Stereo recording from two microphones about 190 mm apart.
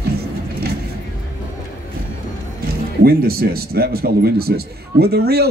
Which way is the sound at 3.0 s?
55° right (ahead or behind).